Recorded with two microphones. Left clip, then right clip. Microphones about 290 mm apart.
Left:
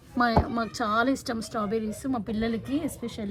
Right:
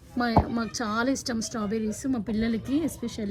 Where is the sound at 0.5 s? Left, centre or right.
Centre.